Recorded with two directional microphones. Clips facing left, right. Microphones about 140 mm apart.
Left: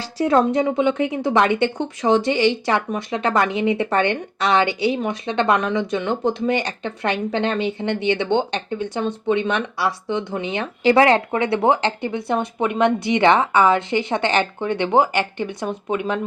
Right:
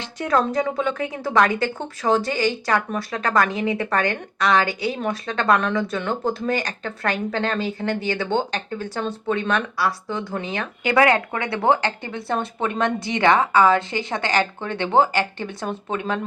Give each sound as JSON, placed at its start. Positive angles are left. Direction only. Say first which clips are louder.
{"t": 0.0, "sound": "a woman's voice", "louder": "left 4 dB", "side_deg": 30}